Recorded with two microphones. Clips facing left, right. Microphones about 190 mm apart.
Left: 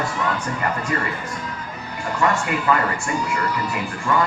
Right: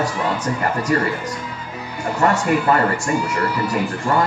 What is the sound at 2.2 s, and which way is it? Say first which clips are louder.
Speech: right 4 dB; 40° right (ahead or behind).